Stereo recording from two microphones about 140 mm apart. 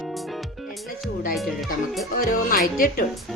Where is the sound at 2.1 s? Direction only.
80° left.